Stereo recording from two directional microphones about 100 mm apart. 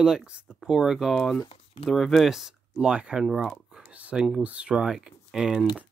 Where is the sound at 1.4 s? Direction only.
65° left (ahead or behind).